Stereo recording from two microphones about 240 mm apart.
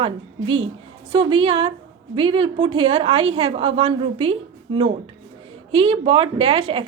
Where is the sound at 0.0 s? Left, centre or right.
Right.